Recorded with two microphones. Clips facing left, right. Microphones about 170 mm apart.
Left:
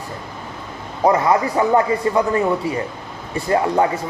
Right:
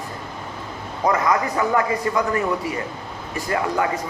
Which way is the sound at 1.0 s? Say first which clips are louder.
Left 4 dB; 30° left (ahead or behind).